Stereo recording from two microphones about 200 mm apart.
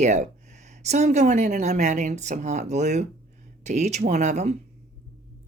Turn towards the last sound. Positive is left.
turn(degrees=-35)  # may be behind; listen again after turning